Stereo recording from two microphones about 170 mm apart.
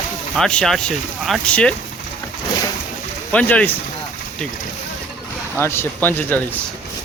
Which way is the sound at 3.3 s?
5° left (ahead or behind).